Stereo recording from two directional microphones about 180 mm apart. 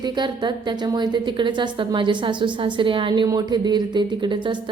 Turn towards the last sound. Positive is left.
turn(degrees=-25)  # may be behind; listen again after turning